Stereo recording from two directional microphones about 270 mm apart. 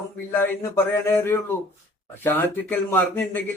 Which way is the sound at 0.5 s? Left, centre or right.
Centre.